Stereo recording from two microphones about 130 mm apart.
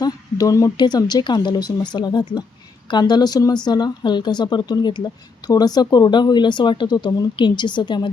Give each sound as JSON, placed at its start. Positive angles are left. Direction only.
{"t": 0.0, "sound": "speech", "side_deg": 30}